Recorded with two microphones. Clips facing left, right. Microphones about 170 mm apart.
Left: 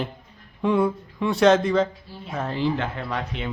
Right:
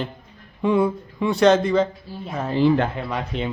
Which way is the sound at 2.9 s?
10° right (ahead or behind).